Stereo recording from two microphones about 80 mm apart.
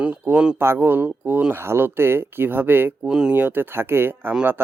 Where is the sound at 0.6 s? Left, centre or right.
Right.